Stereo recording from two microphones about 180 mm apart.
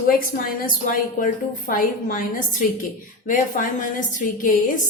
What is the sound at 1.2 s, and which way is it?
A woman's voice, 45° left (ahead or behind).